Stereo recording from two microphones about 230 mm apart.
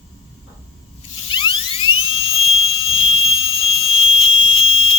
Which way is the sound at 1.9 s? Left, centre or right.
Left.